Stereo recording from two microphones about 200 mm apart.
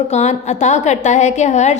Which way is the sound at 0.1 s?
35° left (ahead or behind).